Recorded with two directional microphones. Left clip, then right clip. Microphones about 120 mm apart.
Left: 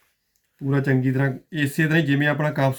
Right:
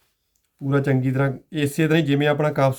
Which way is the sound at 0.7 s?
35° right (ahead or behind).